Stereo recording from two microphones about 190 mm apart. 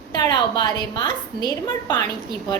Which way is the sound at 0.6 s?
25° left (ahead or behind).